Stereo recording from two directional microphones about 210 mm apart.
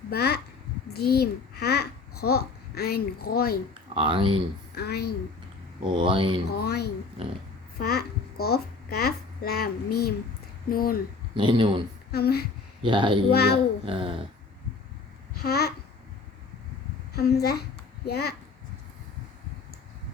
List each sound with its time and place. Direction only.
0.1 s a child's voice: 50° left (ahead or behind)
3.9 s speech: 25° right (ahead or behind)
4.7 s a woman's voice: 50° left (ahead or behind)
5.8 s speech: 25° right (ahead or behind)
6.5 s a child's voice: 50° left (ahead or behind)
11.3 s speech: 20° right (ahead or behind)
12.1 s speech: 50° left (ahead or behind)
12.8 s speech: 25° right (ahead or behind)
13.3 s speech: 50° left (ahead or behind)
13.8 s speech: 25° right (ahead or behind)
15.4 s speech: 50° left (ahead or behind)
17.2 s a child's voice: 50° left (ahead or behind)